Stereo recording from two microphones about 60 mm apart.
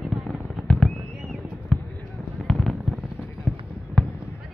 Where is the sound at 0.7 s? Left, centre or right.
Centre.